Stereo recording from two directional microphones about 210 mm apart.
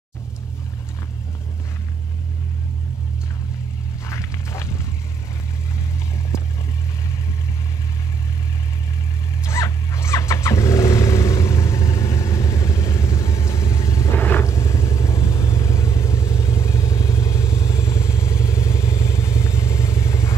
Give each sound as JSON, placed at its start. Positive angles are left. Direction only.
{"t": 4.1, "sound": "music", "side_deg": 15}
{"t": 9.4, "sound": "vehicle", "side_deg": 15}